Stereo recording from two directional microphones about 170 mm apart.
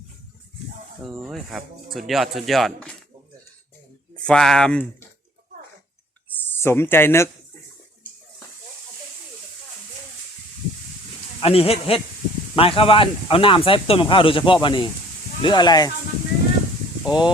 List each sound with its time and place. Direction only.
1.0 s speech: centre (ahead or behind)
4.2 s speech: 5° left (ahead or behind)
6.2 s a sound: 10° left (ahead or behind)
11.3 s speech: 35° left (ahead or behind)
17.1 s speech: 25° left (ahead or behind)